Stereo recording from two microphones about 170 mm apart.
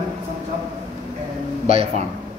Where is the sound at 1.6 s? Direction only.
35° right (ahead or behind).